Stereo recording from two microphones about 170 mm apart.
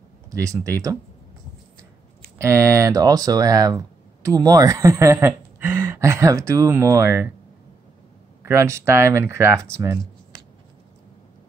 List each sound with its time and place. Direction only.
0.3 s speech: 20° right (ahead or behind)
2.3 s speech: 15° right (ahead or behind)
8.5 s speech: 15° right (ahead or behind)